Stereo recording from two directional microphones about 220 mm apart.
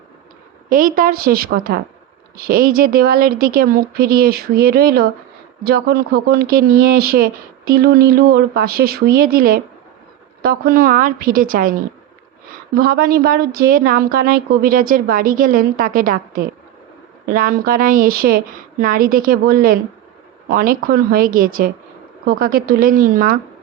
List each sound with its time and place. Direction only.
0.7 s a woman's voice: 40° right (ahead or behind)